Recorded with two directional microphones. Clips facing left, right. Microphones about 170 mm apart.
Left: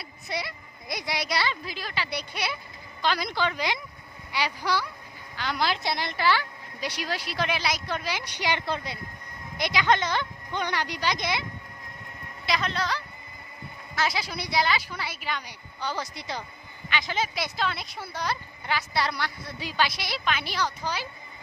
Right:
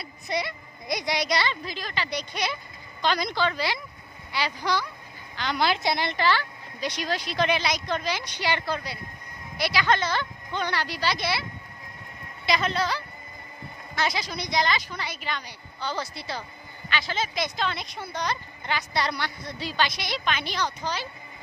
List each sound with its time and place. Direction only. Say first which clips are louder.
0.0 s speech: right 4 dB; 5° left (ahead or behind)
6.1 s speech: even; 10° left (ahead or behind)
12.5 s speech: right 3 dB; centre (ahead or behind)